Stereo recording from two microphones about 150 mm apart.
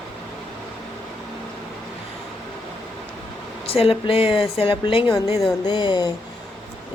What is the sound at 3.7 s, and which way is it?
A woman's voice, 40° left (ahead or behind).